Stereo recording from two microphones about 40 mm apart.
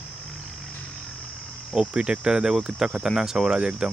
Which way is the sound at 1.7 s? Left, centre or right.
Right.